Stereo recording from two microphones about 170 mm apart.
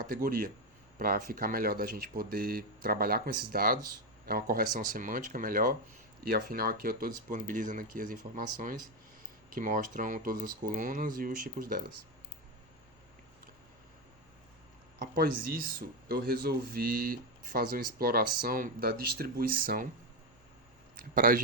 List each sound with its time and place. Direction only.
0.0 s speech: 55° right (ahead or behind)
15.0 s speech: 65° right (ahead or behind)
21.0 s speech: 55° right (ahead or behind)